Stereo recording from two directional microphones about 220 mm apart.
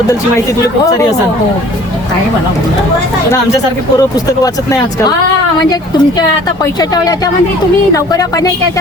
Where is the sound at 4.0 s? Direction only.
15° left (ahead or behind).